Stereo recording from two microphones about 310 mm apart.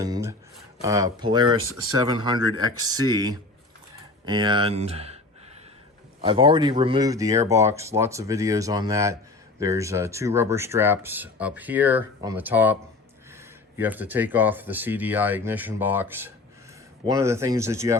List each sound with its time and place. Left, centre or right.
0.0 s a sound: centre
0.8 s speech: centre
6.2 s speech: centre